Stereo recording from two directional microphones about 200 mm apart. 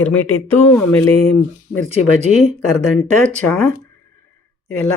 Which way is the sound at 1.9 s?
35° right (ahead or behind).